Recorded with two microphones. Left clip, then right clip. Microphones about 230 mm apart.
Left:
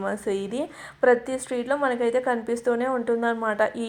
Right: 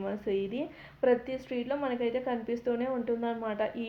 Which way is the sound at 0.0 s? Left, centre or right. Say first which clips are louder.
Left 5 dB; left.